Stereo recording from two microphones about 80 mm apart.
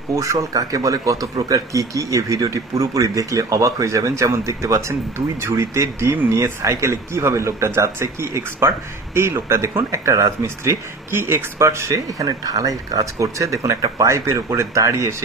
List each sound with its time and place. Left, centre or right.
0.1 s speech: right